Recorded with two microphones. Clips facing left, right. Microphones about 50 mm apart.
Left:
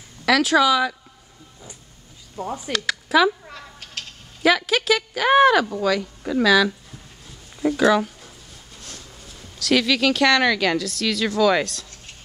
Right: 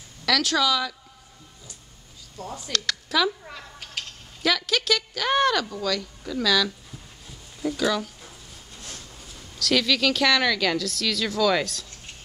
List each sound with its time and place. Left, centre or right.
0.2 s speech: centre
2.3 s speech: centre
3.4 s a sound: centre
4.4 s speech: centre
8.9 s a sound: centre
9.6 s a woman's voice: centre